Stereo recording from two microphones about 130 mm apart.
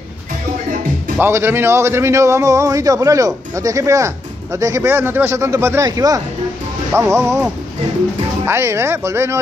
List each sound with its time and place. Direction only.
1.2 s a man's voice: 20° right (ahead or behind)
8.5 s a man's voice: 20° right (ahead or behind)